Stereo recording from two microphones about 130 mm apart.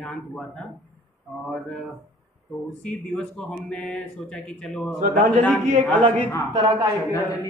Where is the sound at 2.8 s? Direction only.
10° left (ahead or behind).